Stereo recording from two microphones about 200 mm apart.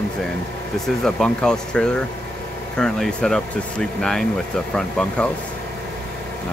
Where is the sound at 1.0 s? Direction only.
5° left (ahead or behind).